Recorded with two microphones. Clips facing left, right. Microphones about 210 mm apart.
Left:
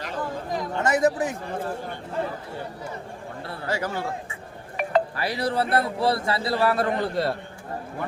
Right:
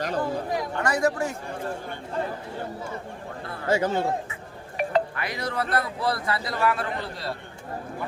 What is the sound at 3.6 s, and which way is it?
Speech, 25° right (ahead or behind).